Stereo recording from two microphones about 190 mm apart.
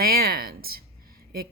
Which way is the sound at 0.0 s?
50° right (ahead or behind).